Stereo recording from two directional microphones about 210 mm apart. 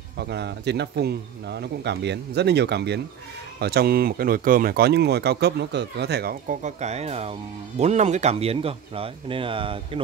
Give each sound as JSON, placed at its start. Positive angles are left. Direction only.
{"t": 0.2, "sound": "speech", "side_deg": -55}